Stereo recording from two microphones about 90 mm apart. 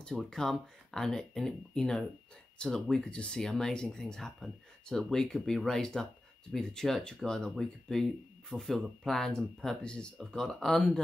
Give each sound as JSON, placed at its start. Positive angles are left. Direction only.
{"t": 0.1, "sound": "speech", "side_deg": 5}